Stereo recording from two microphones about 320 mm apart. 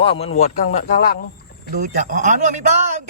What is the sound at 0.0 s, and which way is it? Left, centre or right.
Speech, centre.